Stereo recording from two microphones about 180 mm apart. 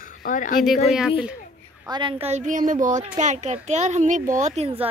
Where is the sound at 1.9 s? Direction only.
25° right (ahead or behind).